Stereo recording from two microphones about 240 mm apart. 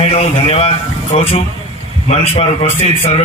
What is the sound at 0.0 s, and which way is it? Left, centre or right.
Speech, left.